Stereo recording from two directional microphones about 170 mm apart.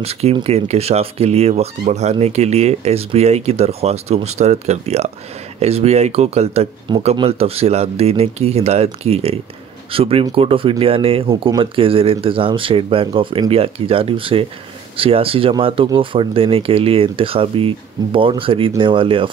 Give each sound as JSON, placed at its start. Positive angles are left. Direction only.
{"t": 0.0, "sound": "a man's voice", "side_deg": -35}